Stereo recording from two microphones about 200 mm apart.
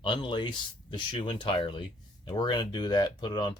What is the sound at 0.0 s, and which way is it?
Speech, 25° left (ahead or behind).